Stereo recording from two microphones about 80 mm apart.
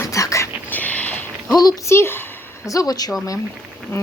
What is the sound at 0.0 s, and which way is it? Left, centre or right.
Whispering, left.